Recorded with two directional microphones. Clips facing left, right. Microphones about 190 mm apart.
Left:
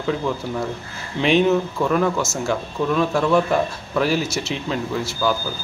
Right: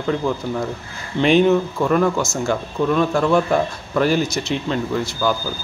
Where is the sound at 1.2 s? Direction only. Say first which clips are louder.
Right 2 dB; centre (ahead or behind).